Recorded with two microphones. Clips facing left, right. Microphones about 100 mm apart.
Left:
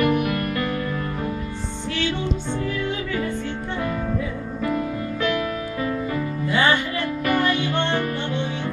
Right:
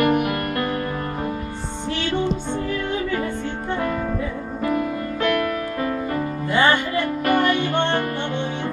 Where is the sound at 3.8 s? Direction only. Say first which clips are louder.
Right 1 dB; 45° right (ahead or behind).